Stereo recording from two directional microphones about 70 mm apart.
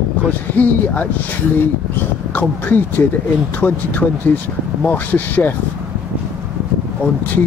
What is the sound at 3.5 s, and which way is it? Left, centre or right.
Speech, left.